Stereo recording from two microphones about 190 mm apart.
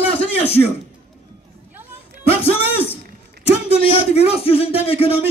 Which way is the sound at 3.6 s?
30° left (ahead or behind).